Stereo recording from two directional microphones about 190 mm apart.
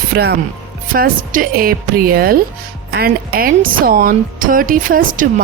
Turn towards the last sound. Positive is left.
turn(degrees=-45)  # may be behind; listen again after turning